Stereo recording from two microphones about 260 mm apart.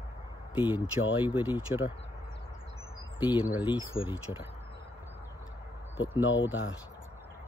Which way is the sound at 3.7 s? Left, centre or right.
Centre.